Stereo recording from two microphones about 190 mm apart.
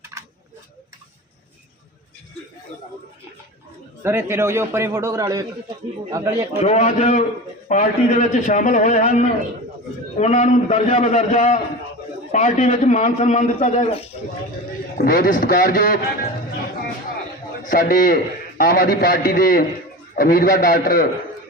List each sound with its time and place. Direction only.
0.0 s a sound: 15° right (ahead or behind)
4.0 s a man's voice: 10° right (ahead or behind)
6.6 s a man's voice: 35° left (ahead or behind)
14.9 s a man's voice: 50° left (ahead or behind)
17.6 s a man's voice: 45° left (ahead or behind)